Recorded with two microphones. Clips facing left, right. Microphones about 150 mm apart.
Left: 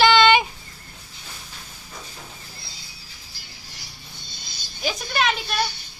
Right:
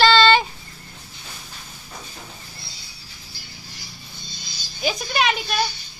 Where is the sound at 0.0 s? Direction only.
15° left (ahead or behind).